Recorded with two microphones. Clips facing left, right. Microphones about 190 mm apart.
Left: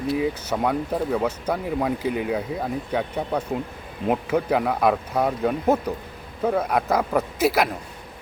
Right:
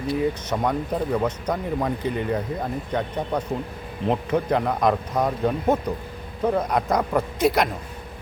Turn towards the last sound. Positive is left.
turn(degrees=5)  # may be behind; listen again after turning